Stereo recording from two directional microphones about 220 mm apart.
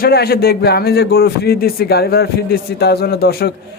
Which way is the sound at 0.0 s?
45° left (ahead or behind).